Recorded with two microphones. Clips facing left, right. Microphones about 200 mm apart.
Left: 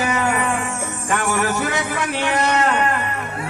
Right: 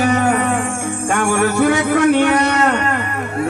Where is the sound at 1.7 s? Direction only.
65° right (ahead or behind).